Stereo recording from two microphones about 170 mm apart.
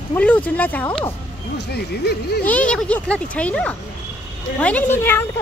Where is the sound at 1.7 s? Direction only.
70° left (ahead or behind).